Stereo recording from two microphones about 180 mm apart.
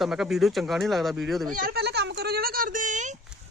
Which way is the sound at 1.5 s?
50° right (ahead or behind).